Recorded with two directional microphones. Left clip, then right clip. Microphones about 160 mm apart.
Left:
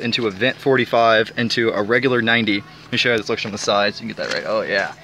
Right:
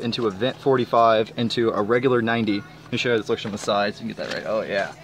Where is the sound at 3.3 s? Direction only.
15° left (ahead or behind).